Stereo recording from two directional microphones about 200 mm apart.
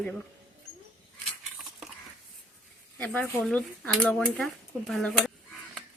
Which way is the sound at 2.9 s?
5° left (ahead or behind).